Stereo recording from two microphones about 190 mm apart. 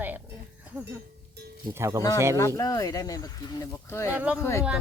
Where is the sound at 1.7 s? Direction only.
15° right (ahead or behind).